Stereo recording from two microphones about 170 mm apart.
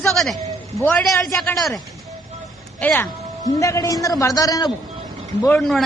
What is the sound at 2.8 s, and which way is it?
Music, 5° left (ahead or behind).